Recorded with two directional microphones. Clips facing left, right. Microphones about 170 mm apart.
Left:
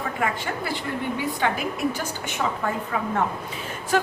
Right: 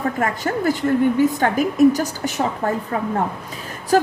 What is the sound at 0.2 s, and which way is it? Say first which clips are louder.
A woman's voice: right 6 dB; 45° right (ahead or behind).